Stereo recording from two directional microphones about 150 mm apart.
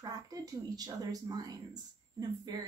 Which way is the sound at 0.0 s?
25° right (ahead or behind).